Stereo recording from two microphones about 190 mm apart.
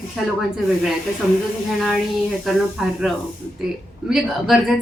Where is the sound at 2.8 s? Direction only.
Centre (ahead or behind).